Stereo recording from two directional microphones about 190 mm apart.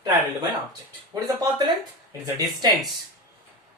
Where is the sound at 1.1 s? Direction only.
20° right (ahead or behind).